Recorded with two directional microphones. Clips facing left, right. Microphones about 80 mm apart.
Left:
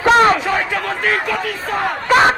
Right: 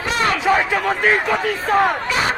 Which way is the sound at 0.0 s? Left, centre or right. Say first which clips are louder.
Left 10 dB; left.